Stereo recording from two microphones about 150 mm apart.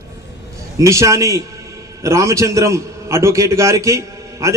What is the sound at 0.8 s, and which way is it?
A man's voice, 20° right (ahead or behind).